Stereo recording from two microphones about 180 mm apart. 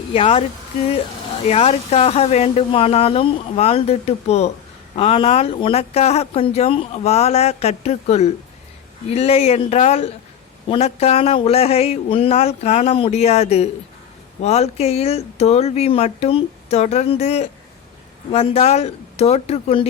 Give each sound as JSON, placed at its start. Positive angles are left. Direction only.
{"t": 0.1, "sound": "speech", "side_deg": 35}
{"t": 1.5, "sound": "speech", "side_deg": 35}